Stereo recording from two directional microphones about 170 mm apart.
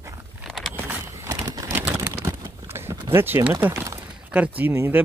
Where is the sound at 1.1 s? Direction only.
20° right (ahead or behind).